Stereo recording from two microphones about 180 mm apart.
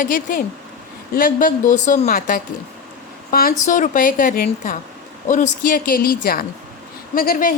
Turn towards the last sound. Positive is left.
turn(degrees=50)  # may be behind; listen again after turning